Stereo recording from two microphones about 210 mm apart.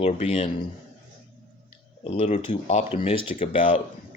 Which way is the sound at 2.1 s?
30° left (ahead or behind).